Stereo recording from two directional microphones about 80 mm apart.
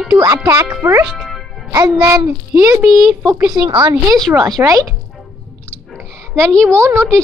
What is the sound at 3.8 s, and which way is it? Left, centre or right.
Speech, right.